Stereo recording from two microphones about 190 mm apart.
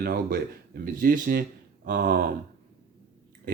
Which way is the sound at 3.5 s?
45° right (ahead or behind).